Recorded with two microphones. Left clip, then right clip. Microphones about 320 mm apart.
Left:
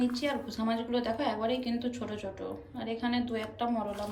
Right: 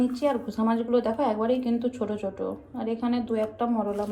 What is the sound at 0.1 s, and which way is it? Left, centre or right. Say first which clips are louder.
A woman's voice: right 7 dB; centre.